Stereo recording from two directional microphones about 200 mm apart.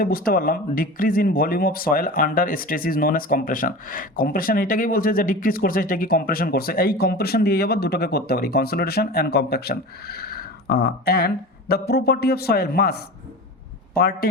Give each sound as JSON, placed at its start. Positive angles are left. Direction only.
{"t": 0.0, "sound": "speech", "side_deg": 45}